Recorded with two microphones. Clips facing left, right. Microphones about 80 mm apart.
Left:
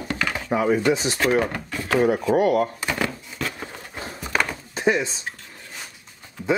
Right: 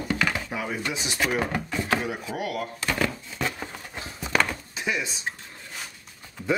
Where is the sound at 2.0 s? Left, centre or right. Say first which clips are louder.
Left 12 dB; left.